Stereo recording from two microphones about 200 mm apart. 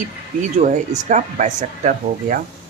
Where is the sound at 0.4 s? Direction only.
35° right (ahead or behind).